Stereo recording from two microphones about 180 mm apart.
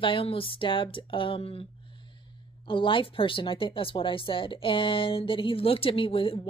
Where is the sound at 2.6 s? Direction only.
30° left (ahead or behind).